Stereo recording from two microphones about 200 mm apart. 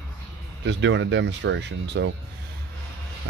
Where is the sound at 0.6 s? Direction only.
65° right (ahead or behind).